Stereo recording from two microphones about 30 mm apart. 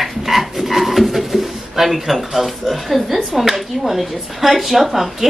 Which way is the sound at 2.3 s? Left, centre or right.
Centre.